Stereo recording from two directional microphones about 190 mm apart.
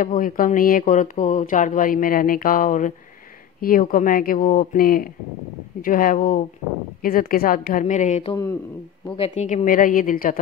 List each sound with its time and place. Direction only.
0.0 s speech: 45° left (ahead or behind)